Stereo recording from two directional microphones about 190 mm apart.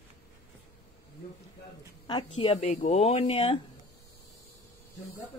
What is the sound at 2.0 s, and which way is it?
Speech, 25° left (ahead or behind).